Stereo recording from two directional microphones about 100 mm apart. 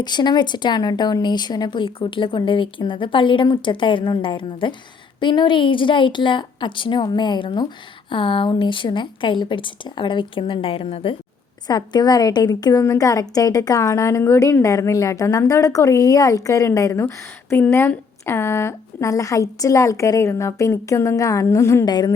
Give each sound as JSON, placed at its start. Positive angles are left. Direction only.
{"t": 0.0, "sound": "a woman's voice", "side_deg": 45}
{"t": 11.7, "sound": "a woman's voice", "side_deg": 45}
{"t": 21.8, "sound": "speech", "side_deg": 45}